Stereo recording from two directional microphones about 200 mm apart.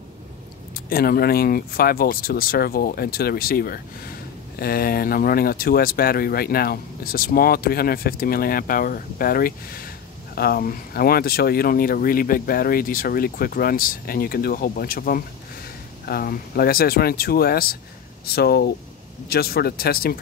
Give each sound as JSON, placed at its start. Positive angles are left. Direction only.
{"t": 0.7, "sound": "speech", "side_deg": 45}